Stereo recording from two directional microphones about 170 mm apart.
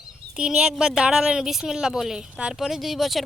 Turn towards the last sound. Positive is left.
turn(degrees=0)  # may be behind; listen again after turning